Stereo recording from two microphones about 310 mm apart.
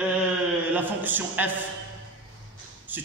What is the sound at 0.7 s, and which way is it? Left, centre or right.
Speech, centre.